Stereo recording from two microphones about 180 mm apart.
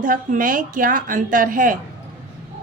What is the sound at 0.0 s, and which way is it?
A woman's voice, 50° right (ahead or behind).